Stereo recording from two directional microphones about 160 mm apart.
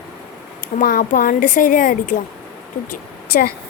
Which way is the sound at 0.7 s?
60° left (ahead or behind).